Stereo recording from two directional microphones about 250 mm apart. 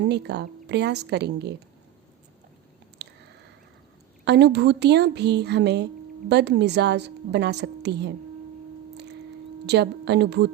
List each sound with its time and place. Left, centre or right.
0.1 s speech: right
3.0 s chewing: right
4.3 s speech: right
9.6 s speech: right